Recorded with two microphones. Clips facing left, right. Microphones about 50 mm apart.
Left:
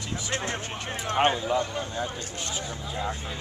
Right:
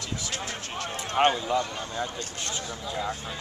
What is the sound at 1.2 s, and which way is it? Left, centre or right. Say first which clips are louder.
Speech: right 2 dB; centre.